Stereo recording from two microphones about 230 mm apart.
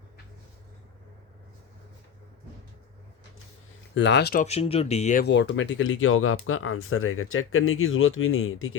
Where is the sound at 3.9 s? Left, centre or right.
Left.